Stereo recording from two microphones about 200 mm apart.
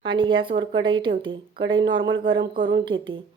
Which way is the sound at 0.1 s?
25° right (ahead or behind).